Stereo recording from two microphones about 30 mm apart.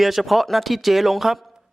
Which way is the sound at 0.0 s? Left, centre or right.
Centre.